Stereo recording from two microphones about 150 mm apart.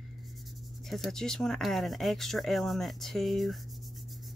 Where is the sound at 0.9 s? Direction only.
Centre (ahead or behind).